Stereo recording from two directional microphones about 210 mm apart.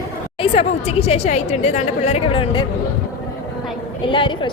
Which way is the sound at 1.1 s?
30° left (ahead or behind).